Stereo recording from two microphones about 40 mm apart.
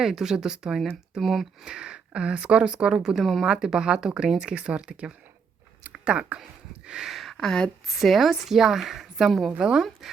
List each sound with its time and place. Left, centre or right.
0.0 s a woman's voice: centre
1.6 s a woman's voice: right
6.8 s speech: centre
7.1 s a sound: centre
7.3 s speech: centre
7.9 s a woman's voice: centre